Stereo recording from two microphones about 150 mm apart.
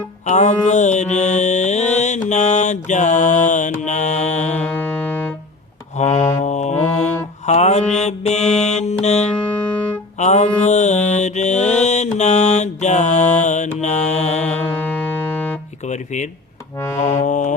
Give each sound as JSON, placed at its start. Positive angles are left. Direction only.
{"t": 0.3, "sound": "mantra", "side_deg": 50}
{"t": 4.5, "sound": "music", "side_deg": 10}
{"t": 6.0, "sound": "a sound", "side_deg": 50}
{"t": 6.4, "sound": "music", "side_deg": 50}
{"t": 6.7, "sound": "music", "side_deg": 15}
{"t": 7.4, "sound": "mantra", "side_deg": 45}
{"t": 9.0, "sound": "music", "side_deg": 50}
{"t": 9.6, "sound": "music", "side_deg": 10}
{"t": 10.2, "sound": "music", "side_deg": 50}
{"t": 10.6, "sound": "mantra", "side_deg": 50}
{"t": 14.4, "sound": "music", "side_deg": 10}
{"t": 17.0, "sound": "music", "side_deg": 50}